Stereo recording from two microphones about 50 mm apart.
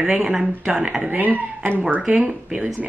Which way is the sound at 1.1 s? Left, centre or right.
Right.